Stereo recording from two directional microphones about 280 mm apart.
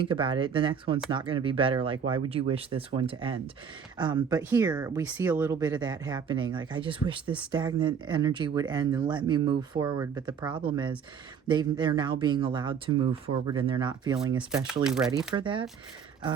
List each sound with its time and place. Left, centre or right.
0.0 s speech: centre
14.8 s speech: centre
15.4 s speech: centre